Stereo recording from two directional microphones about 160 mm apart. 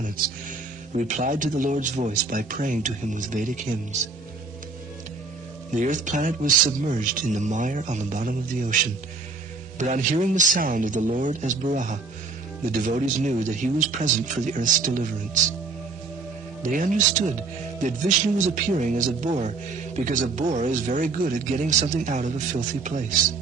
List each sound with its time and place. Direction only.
0.9 s speech: 50° right (ahead or behind)
5.7 s speech: 50° right (ahead or behind)
9.7 s speech: 50° right (ahead or behind)
16.6 s speech: 55° right (ahead or behind)
18.3 s speech: 55° right (ahead or behind)